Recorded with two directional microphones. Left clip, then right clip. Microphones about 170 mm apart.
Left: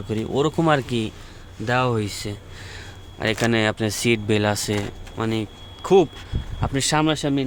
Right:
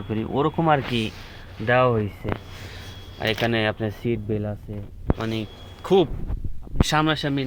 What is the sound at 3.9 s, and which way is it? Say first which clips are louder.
Speech: left 6 dB; 45° left (ahead or behind).